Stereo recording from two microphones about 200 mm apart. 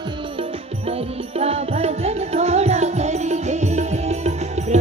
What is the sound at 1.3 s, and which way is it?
Music, 30° right (ahead or behind).